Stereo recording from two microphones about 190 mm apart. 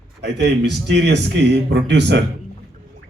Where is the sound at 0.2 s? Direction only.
65° right (ahead or behind).